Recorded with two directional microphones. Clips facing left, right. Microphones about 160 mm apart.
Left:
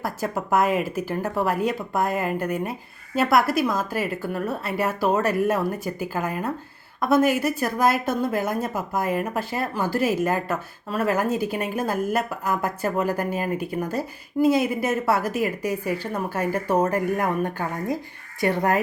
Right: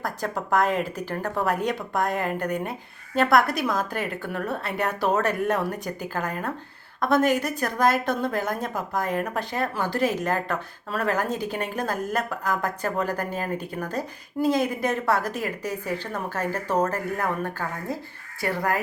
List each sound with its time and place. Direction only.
0.0 s a woman's voice: 5° left (ahead or behind)